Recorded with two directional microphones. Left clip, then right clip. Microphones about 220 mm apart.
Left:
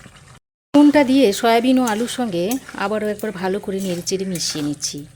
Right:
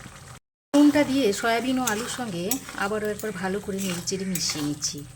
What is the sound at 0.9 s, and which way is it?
Speech, 35° left (ahead or behind).